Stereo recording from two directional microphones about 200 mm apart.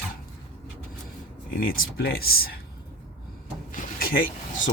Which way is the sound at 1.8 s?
50° left (ahead or behind).